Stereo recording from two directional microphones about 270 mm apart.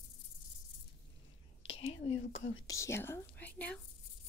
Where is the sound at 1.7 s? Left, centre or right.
Left.